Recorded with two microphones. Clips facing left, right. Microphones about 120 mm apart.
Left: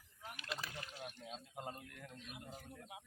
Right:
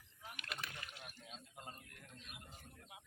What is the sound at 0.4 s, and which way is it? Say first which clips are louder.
Rowboat: left 3 dB; 35° left (ahead or behind).